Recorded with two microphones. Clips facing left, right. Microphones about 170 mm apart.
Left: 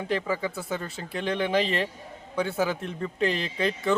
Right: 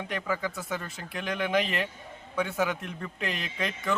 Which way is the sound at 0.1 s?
30° left (ahead or behind).